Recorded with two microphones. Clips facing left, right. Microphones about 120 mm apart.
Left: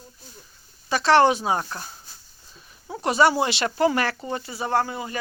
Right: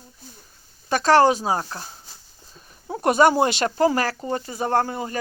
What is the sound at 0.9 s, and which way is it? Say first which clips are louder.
Speech: right 1 dB; 45° right (ahead or behind).